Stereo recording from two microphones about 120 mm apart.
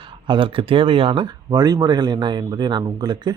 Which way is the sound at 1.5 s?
30° right (ahead or behind).